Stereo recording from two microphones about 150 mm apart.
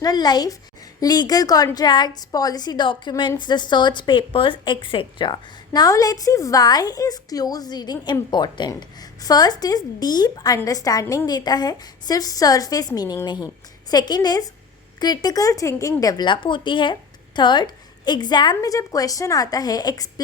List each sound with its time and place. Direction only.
0.0 s a woman's voice: 25° left (ahead or behind)